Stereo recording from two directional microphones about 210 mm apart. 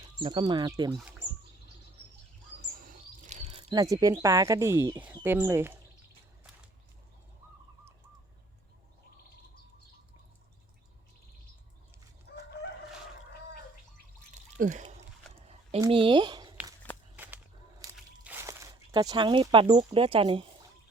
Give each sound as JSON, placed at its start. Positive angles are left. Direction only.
{"t": 0.2, "sound": "speech", "side_deg": -25}
{"t": 2.7, "sound": "chirp", "side_deg": -40}
{"t": 3.6, "sound": "speech", "side_deg": -20}
{"t": 14.6, "sound": "a sound", "side_deg": -35}
{"t": 17.2, "sound": "walk", "side_deg": -10}